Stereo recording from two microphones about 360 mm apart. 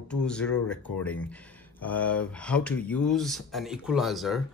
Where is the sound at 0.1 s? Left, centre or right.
Centre.